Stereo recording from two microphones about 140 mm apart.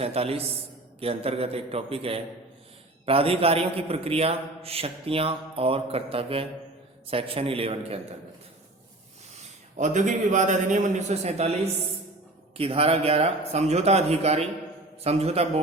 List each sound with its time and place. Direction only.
0.0 s a man's voice: 45° right (ahead or behind)
9.3 s a man's voice: 60° right (ahead or behind)